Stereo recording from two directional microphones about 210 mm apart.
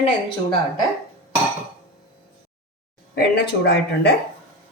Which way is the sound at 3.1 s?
50° left (ahead or behind).